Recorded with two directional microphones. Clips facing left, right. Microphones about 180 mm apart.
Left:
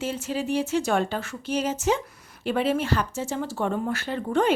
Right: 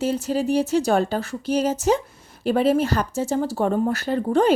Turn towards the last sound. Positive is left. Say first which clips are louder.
# right 5 dB
turn(degrees=-35)  # may be behind; listen again after turning